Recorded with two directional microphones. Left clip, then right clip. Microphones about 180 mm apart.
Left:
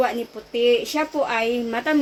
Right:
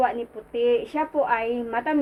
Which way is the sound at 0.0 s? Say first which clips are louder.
Left 1 dB; 70° left (ahead or behind).